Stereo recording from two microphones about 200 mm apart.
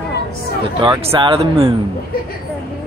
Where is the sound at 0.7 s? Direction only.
25° right (ahead or behind).